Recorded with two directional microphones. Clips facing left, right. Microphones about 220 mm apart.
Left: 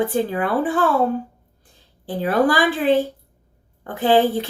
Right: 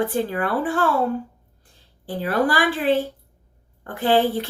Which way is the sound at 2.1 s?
15° left (ahead or behind).